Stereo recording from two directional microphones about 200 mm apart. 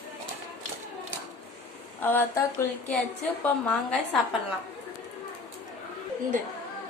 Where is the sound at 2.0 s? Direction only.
10° left (ahead or behind).